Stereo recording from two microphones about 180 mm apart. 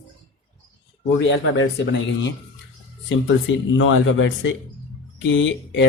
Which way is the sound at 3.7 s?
90° left.